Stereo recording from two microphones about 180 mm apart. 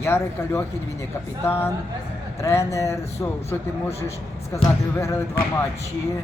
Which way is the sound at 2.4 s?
15° left (ahead or behind).